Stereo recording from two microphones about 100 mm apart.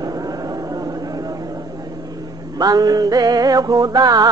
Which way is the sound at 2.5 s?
40° right (ahead or behind).